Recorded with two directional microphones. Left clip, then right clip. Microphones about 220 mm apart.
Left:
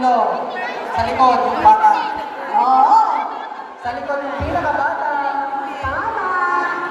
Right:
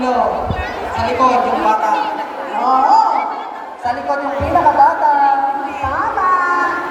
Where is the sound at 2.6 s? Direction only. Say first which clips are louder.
Right 1 dB; 15° left (ahead or behind).